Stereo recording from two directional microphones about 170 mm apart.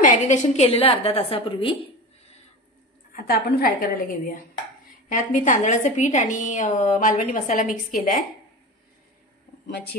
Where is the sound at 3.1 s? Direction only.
60° left (ahead or behind).